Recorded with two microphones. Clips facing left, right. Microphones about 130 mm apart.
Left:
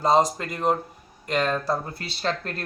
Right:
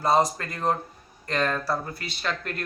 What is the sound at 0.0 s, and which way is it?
Speech, 15° left (ahead or behind).